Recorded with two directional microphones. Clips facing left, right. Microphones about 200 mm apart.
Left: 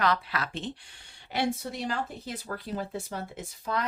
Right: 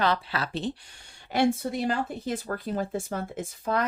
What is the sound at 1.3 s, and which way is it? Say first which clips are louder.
A woman's voice: right 6 dB; 50° right (ahead or behind).